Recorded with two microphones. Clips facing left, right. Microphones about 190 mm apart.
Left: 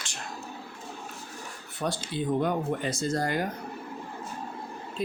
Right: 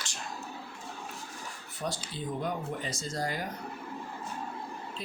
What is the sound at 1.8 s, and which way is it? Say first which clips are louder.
Speech: left 6 dB; 60° left (ahead or behind).